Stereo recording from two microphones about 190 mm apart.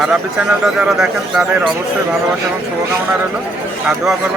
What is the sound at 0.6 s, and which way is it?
A man's voice, 5° right (ahead or behind).